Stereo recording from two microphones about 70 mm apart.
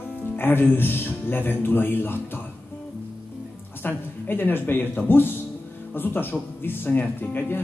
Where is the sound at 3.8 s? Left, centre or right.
Left.